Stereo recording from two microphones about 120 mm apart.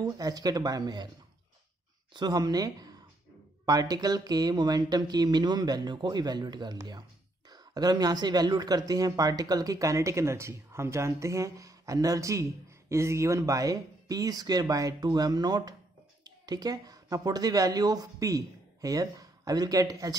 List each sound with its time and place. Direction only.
0.0 s speech: 35° right (ahead or behind)
2.1 s speech: 35° right (ahead or behind)